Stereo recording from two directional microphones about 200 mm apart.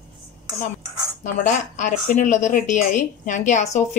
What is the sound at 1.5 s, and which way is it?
A woman's voice, 40° left (ahead or behind).